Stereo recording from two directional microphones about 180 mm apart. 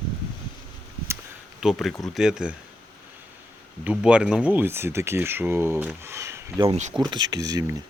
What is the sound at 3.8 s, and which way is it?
Speech, 5° right (ahead or behind).